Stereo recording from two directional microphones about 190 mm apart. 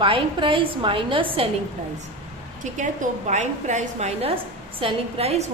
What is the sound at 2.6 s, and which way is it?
A woman's voice, 40° right (ahead or behind).